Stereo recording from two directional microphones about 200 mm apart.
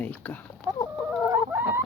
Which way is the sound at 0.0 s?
10° left (ahead or behind).